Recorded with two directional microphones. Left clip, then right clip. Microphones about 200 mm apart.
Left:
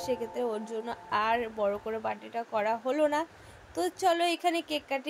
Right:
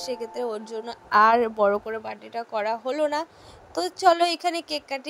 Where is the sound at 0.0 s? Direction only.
40° right (ahead or behind).